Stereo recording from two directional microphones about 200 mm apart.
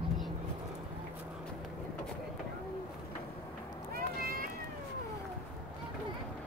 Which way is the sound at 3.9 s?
50° right (ahead or behind).